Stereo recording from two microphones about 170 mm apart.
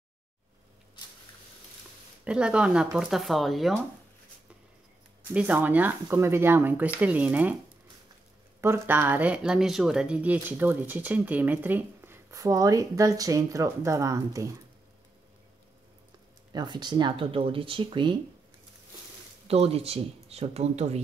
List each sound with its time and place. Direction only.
2.2 s speech: 5° right (ahead or behind)
5.3 s speech: 10° right (ahead or behind)
8.5 s speech: 15° right (ahead or behind)
16.5 s speech: 25° right (ahead or behind)
19.4 s speech: 35° right (ahead or behind)